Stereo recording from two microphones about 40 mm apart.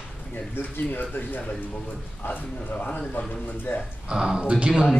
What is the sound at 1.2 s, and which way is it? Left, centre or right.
A man's voice, left.